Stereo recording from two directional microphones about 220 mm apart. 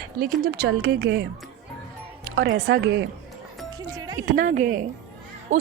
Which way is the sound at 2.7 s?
50° right (ahead or behind).